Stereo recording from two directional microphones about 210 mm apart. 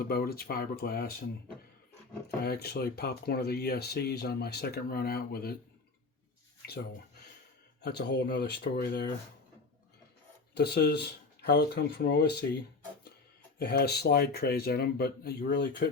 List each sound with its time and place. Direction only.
0.0 s speech: 45° left (ahead or behind)
2.4 s speech: 50° left (ahead or behind)
7.8 s speech: 55° left (ahead or behind)
10.5 s speech: 50° left (ahead or behind)
13.6 s speech: 50° left (ahead or behind)